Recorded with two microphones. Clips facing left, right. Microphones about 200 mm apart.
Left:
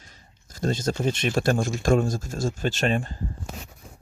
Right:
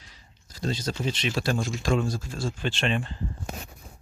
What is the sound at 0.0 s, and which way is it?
Speech, 50° left (ahead or behind).